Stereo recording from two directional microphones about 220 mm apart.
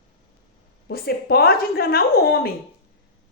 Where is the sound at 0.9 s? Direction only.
45° left (ahead or behind).